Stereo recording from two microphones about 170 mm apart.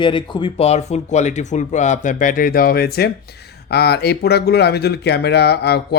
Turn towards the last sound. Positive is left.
turn(degrees=75)  # may be behind; listen again after turning